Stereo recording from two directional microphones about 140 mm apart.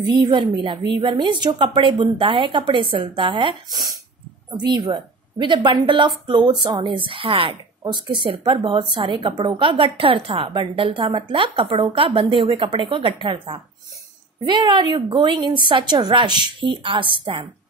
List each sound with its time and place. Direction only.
0.2 s a woman's voice: 35° right (ahead or behind)